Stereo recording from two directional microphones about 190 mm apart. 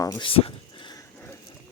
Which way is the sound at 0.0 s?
20° left (ahead or behind).